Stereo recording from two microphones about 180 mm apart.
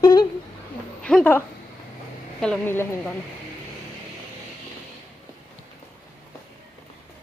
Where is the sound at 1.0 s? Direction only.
5° left (ahead or behind).